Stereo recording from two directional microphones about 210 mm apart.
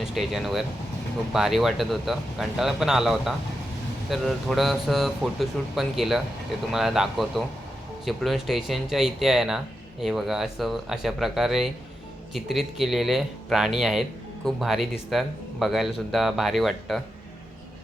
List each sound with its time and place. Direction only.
0.0 s speech: centre (ahead or behind)